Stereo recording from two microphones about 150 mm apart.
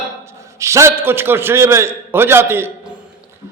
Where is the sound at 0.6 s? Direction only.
20° right (ahead or behind).